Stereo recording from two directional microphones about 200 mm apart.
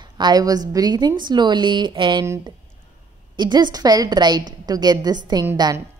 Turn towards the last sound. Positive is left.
turn(degrees=-15)  # may be behind; listen again after turning